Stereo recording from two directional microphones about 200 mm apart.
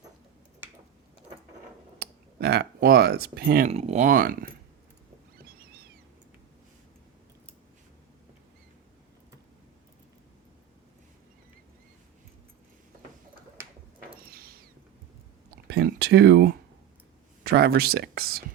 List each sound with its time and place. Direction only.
2.0 s speech: 55° right (ahead or behind)
3.7 s speech: 30° right (ahead or behind)
14.0 s sliding door: 45° right (ahead or behind)
15.6 s a sound: 55° right (ahead or behind)
17.4 s speech: 50° right (ahead or behind)